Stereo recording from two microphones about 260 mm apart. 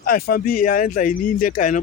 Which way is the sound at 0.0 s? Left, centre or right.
Left.